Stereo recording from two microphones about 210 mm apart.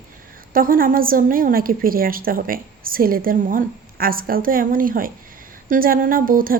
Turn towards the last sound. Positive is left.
turn(degrees=-40)  # may be behind; listen again after turning